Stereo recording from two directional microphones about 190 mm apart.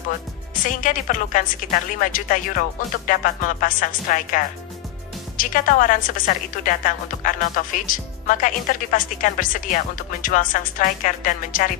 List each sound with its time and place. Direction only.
0.7 s speech: 45° left (ahead or behind)
5.4 s speech: 45° left (ahead or behind)